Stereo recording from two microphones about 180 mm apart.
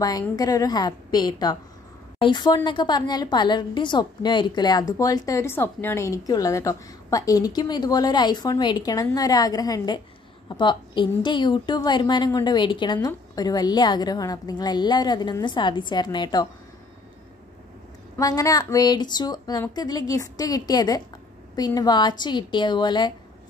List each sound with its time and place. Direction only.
0.0 s a woman's voice: 20° left (ahead or behind)
18.1 s a woman's voice: 20° left (ahead or behind)